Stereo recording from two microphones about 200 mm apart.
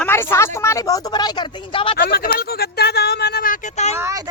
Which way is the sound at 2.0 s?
50° left (ahead or behind).